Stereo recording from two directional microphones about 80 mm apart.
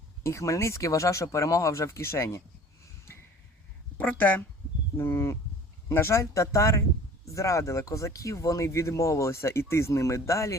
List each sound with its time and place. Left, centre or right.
0.2 s speech: left
3.9 s a woman's voice: left
4.9 s speech: left